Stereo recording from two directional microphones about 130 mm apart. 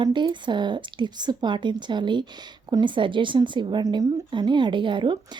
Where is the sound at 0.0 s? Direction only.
35° right (ahead or behind).